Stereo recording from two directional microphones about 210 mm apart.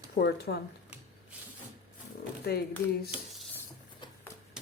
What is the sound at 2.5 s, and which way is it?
Speech, 50° left (ahead or behind).